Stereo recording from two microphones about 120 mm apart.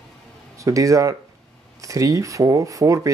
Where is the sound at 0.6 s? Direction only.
25° right (ahead or behind).